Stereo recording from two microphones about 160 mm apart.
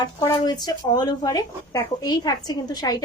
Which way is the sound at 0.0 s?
25° left (ahead or behind).